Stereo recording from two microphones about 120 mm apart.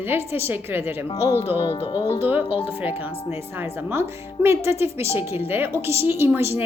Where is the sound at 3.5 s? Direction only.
15° right (ahead or behind).